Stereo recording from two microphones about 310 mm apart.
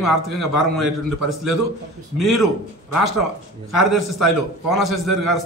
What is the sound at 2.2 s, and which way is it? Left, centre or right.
Speech, centre.